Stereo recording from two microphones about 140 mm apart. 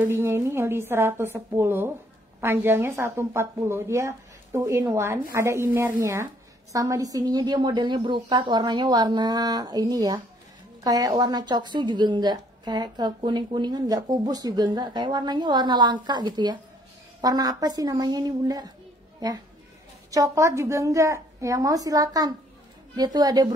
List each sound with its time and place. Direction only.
0.1 s a woman's voice: 20° right (ahead or behind)
19.1 s a sound: 30° right (ahead or behind)
20.1 s a woman's voice: 25° right (ahead or behind)